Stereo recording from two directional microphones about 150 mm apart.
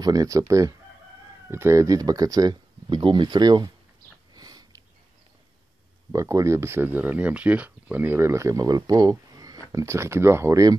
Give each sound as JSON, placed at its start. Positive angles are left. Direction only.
{"t": 0.0, "sound": "speech", "side_deg": -25}
{"t": 4.3, "sound": "sniff", "side_deg": -25}
{"t": 6.1, "sound": "speech", "side_deg": -20}